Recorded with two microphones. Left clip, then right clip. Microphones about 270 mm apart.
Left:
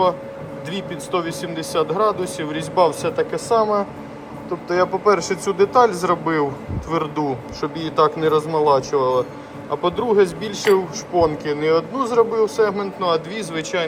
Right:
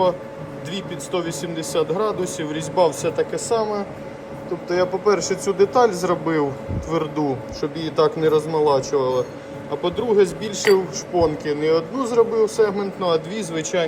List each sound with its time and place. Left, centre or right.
0.7 s speech: centre